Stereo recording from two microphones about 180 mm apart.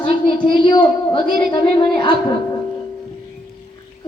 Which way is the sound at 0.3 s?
25° left (ahead or behind).